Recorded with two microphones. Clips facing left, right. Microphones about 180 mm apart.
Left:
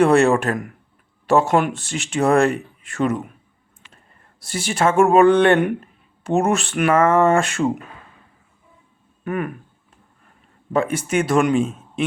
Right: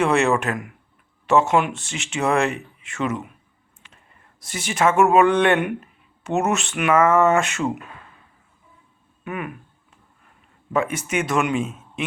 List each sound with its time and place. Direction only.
0.0 s speech: 35° left (ahead or behind)
4.5 s speech: 30° left (ahead or behind)
9.2 s speech: 40° left (ahead or behind)
10.7 s speech: 30° left (ahead or behind)